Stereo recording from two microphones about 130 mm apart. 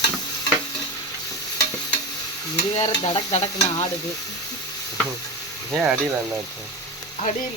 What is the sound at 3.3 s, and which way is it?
Stir, 55° left (ahead or behind).